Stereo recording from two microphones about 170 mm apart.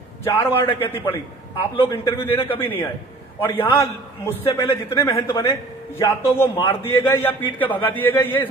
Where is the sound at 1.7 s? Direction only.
30° left (ahead or behind).